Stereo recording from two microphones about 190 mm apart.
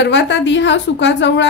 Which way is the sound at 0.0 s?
65° left (ahead or behind).